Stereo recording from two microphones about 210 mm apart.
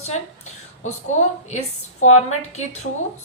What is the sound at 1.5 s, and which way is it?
Speech, 30° left (ahead or behind).